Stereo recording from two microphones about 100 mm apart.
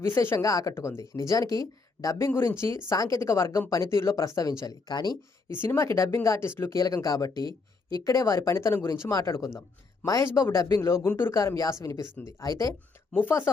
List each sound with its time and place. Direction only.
0.0 s speech: 25° left (ahead or behind); by 5.1 s 45° left (ahead or behind)
5.6 s speech: 30° left (ahead or behind)